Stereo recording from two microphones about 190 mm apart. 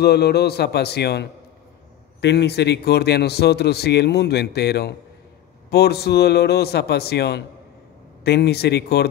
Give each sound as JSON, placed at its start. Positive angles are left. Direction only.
{"t": 0.0, "sound": "speech", "side_deg": 60}